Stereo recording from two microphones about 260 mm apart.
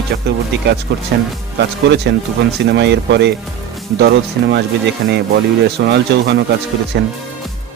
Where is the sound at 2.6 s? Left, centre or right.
Right.